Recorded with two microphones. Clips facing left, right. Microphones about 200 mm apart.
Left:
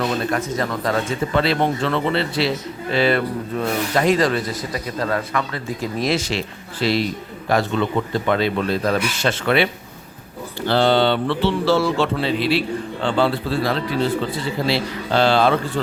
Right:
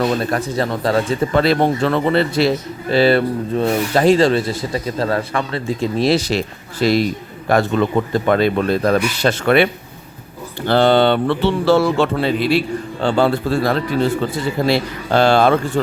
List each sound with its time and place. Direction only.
0.0 s speech: 35° right (ahead or behind)
1.3 s speech: 45° right (ahead or behind)
10.7 s speech: 55° right (ahead or behind)